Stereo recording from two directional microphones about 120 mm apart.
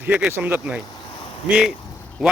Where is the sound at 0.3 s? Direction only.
15° right (ahead or behind).